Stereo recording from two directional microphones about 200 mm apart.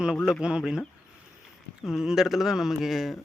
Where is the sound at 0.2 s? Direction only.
Centre (ahead or behind).